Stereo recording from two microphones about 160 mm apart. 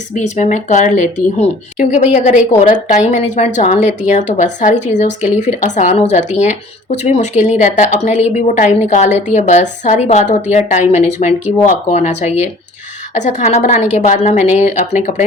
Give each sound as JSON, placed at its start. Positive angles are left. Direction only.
{"t": 0.1, "sound": "a woman's voice", "side_deg": 45}